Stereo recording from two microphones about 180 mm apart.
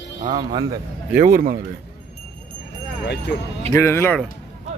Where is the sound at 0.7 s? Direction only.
50° right (ahead or behind).